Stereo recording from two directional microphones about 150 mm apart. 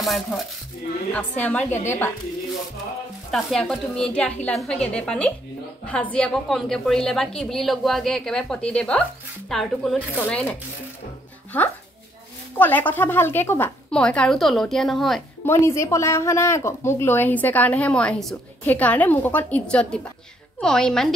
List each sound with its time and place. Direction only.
0.0 s a woman's voice: centre (ahead or behind)
3.3 s a woman's voice: centre (ahead or behind)
15.4 s a woman's voice: 15° left (ahead or behind)